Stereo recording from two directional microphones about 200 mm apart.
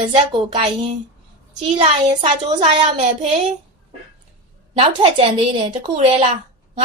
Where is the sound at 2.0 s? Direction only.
25° right (ahead or behind).